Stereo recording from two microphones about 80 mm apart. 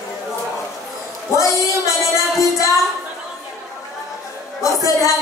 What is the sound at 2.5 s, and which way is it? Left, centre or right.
Music, left.